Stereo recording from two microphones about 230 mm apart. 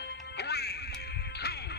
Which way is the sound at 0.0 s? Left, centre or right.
Left.